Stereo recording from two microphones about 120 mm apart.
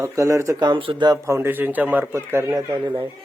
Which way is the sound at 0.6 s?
45° right (ahead or behind).